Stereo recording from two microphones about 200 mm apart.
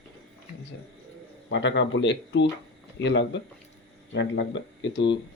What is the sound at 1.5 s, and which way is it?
Speech, 65° left (ahead or behind).